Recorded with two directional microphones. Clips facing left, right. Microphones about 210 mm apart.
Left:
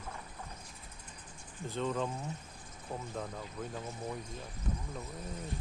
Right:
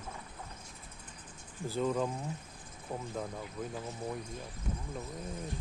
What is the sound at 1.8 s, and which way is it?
Speech, 10° right (ahead or behind).